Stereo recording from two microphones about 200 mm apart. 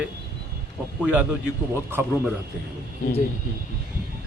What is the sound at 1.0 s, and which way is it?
Speech, 10° right (ahead or behind).